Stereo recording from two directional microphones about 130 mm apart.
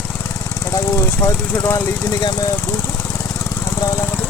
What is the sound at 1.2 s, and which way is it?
Speech, 20° left (ahead or behind).